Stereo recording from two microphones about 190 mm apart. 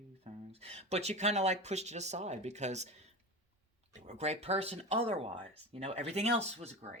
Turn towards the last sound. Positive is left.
turn(degrees=-35)  # may be behind; listen again after turning